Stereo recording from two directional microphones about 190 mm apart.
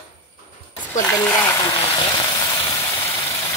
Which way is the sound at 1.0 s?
15° left (ahead or behind).